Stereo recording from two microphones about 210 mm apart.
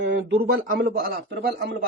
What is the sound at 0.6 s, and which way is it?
Speech, 45° right (ahead or behind).